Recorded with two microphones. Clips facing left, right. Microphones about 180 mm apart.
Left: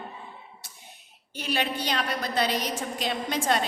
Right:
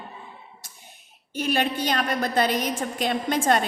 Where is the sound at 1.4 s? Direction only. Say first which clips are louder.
Right 5 dB; 50° right (ahead or behind).